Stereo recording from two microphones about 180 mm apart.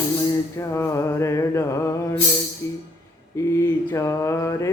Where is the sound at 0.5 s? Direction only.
15° left (ahead or behind).